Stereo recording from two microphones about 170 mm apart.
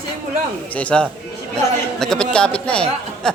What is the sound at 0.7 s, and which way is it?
Speech, 5° left (ahead or behind).